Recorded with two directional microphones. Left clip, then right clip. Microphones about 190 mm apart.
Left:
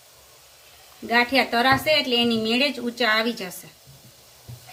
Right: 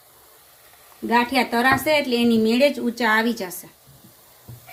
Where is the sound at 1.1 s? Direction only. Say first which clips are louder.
Even; 50° right (ahead or behind).